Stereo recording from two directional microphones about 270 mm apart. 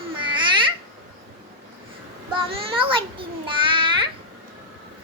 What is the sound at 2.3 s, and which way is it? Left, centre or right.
A child's voice, right.